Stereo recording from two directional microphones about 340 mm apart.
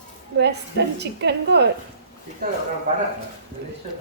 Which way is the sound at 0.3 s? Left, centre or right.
Right.